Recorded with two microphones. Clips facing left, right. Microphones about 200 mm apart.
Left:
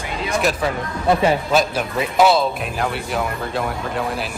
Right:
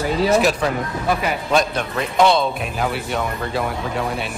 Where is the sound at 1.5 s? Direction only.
5° left (ahead or behind).